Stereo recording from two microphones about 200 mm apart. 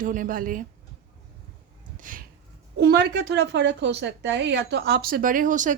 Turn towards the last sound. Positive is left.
turn(degrees=-40)  # may be behind; listen again after turning